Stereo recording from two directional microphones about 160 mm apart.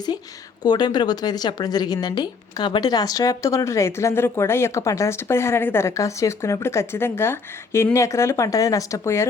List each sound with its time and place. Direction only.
0.6 s speech: 25° left (ahead or behind)